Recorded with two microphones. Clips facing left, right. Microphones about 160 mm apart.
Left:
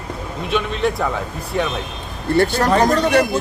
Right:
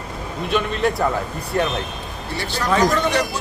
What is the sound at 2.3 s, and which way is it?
Speech, 55° left (ahead or behind).